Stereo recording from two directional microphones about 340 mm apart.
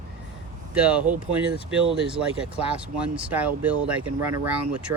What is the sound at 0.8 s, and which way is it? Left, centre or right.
Speech, centre.